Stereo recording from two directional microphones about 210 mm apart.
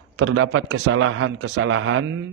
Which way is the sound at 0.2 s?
65° right (ahead or behind).